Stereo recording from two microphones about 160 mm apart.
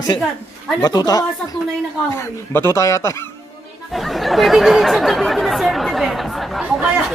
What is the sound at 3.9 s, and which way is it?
Speech, centre (ahead or behind).